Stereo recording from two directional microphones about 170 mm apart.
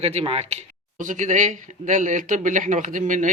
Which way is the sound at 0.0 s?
40° right (ahead or behind).